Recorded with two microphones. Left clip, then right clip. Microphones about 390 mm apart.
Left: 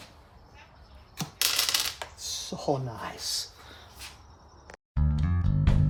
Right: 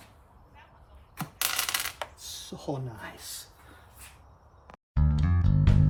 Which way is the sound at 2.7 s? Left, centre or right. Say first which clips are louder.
Left 7 dB; centre.